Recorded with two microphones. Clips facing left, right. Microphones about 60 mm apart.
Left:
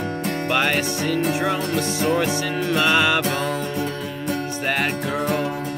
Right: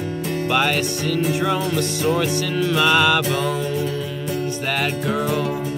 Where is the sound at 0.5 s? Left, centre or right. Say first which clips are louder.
Right 1 dB; centre.